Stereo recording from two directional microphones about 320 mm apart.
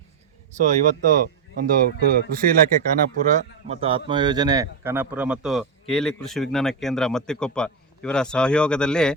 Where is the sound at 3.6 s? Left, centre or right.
Centre.